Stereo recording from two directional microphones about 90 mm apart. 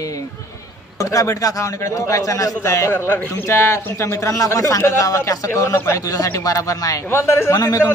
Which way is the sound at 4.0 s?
35° left (ahead or behind).